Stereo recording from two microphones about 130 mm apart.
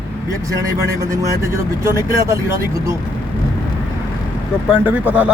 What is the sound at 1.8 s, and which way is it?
Speech, 20° right (ahead or behind).